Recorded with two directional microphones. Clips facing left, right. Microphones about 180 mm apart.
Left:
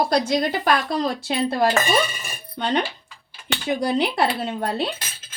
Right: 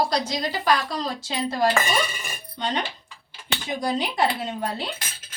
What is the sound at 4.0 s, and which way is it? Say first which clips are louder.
Speech: left 3 dB; 60° left (ahead or behind).